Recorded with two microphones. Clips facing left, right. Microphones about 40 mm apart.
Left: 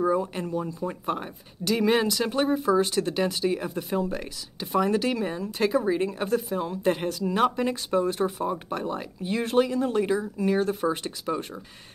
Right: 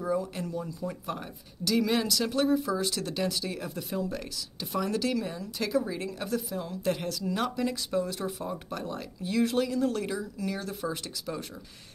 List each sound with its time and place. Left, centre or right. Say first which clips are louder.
0.0 s speech: left 5 dB; left